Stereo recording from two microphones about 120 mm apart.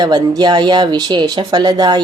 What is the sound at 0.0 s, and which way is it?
Speech, 35° right (ahead or behind).